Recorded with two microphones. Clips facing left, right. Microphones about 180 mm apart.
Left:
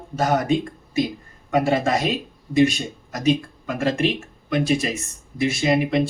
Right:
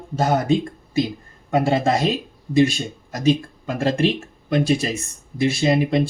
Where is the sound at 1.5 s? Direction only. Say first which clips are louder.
Right 1 dB; 30° right (ahead or behind).